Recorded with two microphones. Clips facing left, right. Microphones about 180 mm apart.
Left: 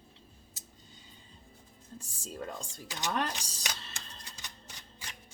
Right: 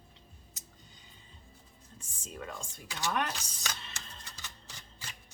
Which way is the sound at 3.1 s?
35° left (ahead or behind).